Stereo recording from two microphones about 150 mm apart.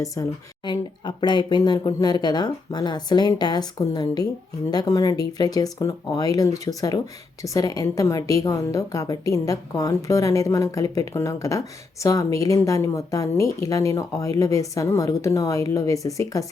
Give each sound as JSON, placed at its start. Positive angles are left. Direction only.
{"t": 0.0, "sound": "a woman's voice", "side_deg": 25}